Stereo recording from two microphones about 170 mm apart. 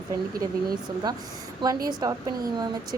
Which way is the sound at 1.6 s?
25° right (ahead or behind).